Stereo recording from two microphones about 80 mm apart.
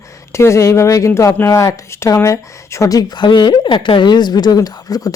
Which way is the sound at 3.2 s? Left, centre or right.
Left.